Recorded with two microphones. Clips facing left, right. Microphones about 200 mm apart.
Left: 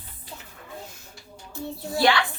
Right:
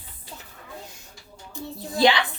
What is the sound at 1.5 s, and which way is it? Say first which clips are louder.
Speech: left 2 dB; 20° right (ahead or behind).